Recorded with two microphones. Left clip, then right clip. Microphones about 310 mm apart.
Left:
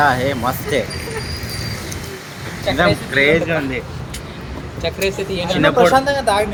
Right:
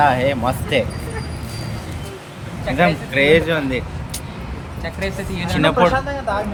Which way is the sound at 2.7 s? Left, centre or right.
Centre.